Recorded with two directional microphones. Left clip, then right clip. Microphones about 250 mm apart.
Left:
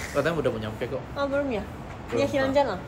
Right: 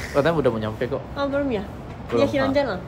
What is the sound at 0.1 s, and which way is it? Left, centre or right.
Speech, centre.